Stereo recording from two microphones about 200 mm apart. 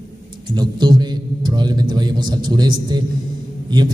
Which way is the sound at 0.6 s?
20° right (ahead or behind).